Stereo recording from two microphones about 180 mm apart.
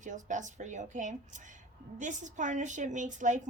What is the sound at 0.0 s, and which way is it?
A woman's voice, 45° right (ahead or behind).